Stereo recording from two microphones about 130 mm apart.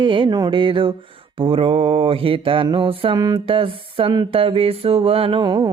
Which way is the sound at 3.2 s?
30° right (ahead or behind).